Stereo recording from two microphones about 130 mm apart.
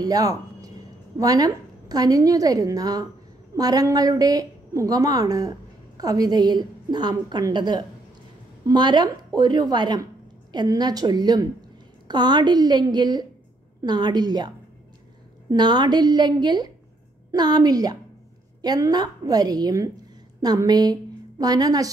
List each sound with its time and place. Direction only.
0.0 s a woman's voice: 30° right (ahead or behind)
15.5 s a woman's voice: 35° right (ahead or behind)